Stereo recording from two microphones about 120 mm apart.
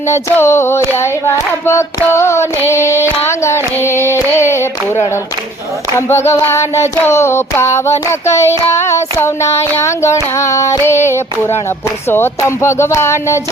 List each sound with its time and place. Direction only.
0.1 s child singing: 20° left (ahead or behind)
6.0 s child singing: 20° left (ahead or behind)